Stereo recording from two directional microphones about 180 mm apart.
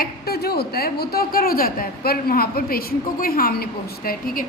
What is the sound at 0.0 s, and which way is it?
A woman's voice, 60° left (ahead or behind).